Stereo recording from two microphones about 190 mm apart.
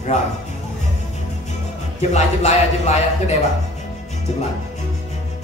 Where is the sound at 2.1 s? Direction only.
35° left (ahead or behind).